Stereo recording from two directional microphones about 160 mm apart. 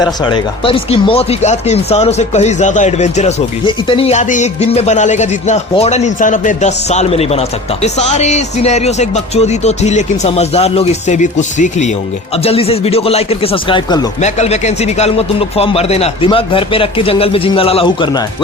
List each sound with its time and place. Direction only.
0.3 s speech: 30° left (ahead or behind)
3.7 s speech: 35° left (ahead or behind)
12.4 s speech: 40° left (ahead or behind)
14.2 s speech: 45° left (ahead or behind)